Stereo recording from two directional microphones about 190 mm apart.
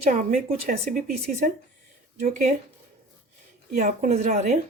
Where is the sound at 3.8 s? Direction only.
40° right (ahead or behind).